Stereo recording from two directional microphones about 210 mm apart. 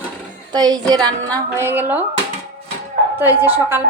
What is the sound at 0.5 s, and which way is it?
A woman's voice, 20° right (ahead or behind).